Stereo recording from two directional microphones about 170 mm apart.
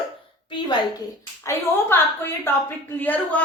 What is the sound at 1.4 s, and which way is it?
A woman's voice, 15° left (ahead or behind).